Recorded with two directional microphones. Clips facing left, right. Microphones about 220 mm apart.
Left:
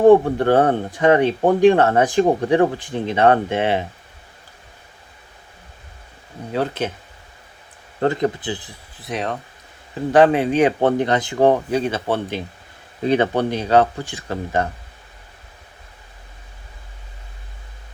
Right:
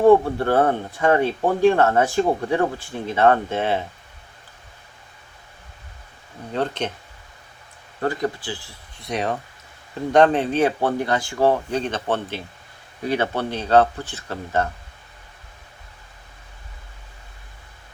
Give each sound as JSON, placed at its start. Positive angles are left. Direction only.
{"t": 0.1, "sound": "speech", "side_deg": 15}
{"t": 6.5, "sound": "speech", "side_deg": 5}
{"t": 8.0, "sound": "speech", "side_deg": 25}
{"t": 9.0, "sound": "speech", "side_deg": 0}
{"t": 11.4, "sound": "speech", "side_deg": 10}